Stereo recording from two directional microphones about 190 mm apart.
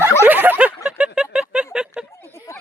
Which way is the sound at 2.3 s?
15° left (ahead or behind).